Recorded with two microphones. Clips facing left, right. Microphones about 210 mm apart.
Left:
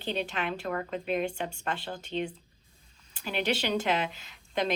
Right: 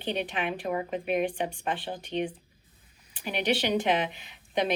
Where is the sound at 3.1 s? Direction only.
15° right (ahead or behind).